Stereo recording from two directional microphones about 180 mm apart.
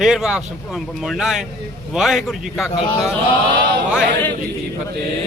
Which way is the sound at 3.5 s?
70° right (ahead or behind).